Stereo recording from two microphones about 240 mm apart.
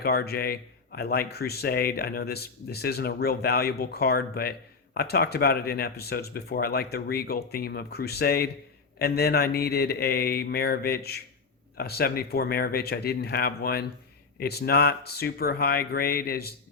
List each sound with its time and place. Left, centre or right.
0.0 s speech: left